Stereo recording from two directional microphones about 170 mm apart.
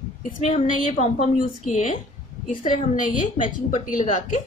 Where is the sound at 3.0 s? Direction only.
50° left (ahead or behind).